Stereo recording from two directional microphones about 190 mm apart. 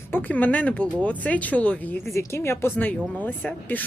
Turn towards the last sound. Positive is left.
turn(degrees=10)  # may be behind; listen again after turning